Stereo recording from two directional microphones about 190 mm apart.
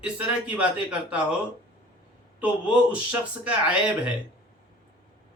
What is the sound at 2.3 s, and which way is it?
A man's voice, 5° right (ahead or behind).